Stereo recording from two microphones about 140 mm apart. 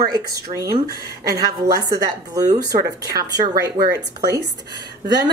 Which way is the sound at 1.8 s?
25° right (ahead or behind).